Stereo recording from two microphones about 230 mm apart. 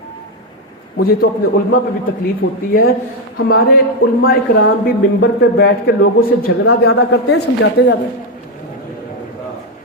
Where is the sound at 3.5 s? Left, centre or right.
Left.